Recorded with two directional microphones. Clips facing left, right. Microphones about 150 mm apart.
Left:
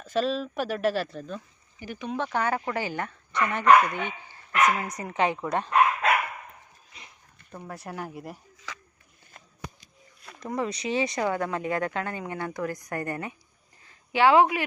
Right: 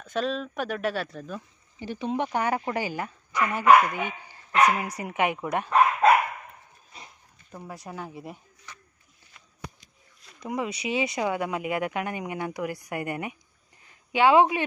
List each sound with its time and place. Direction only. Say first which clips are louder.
0.0 s speech: left 2 dB; centre (ahead or behind)
1.8 s speech: right 3 dB; 25° right (ahead or behind)
7.5 s speech: left 1 dB; 5° right (ahead or behind)
8.7 s a sound: left 6 dB; 90° left
10.4 s speech: even; 10° right (ahead or behind)
13.8 s a sound: even; 20° right (ahead or behind)